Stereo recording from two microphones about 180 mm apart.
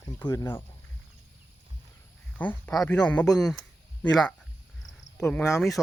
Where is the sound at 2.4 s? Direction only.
10° left (ahead or behind).